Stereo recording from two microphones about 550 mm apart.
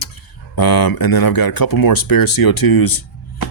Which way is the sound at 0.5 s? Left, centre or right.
Left.